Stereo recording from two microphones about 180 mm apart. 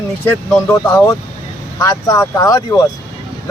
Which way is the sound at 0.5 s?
10° left (ahead or behind).